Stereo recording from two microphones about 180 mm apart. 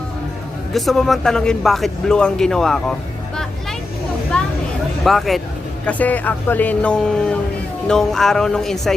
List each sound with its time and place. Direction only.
0.7 s speech: centre (ahead or behind)
4.3 s a sound: 5° left (ahead or behind)
5.0 s speech: centre (ahead or behind)